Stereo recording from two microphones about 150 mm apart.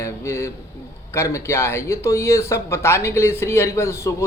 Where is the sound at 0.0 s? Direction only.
20° left (ahead or behind).